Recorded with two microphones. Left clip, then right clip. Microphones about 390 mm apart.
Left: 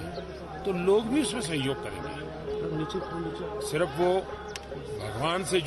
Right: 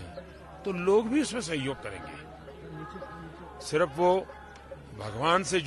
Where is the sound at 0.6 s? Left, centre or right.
Right.